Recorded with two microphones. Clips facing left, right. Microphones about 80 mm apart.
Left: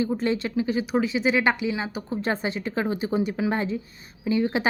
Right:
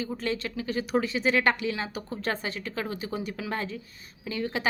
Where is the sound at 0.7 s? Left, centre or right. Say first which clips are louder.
Left 1 dB; centre.